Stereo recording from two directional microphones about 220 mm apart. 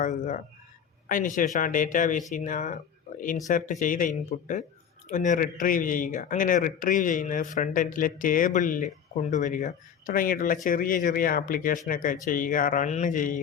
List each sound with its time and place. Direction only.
0.0 s a man's voice: 35° left (ahead or behind)